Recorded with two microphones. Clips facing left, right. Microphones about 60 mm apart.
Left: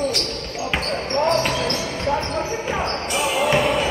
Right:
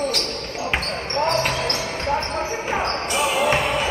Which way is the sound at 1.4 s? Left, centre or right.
Right.